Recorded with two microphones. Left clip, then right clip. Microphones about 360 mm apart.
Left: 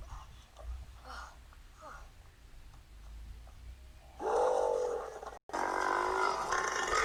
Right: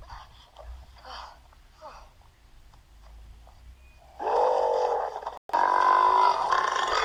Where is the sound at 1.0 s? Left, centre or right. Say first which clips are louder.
Right 6 dB; centre.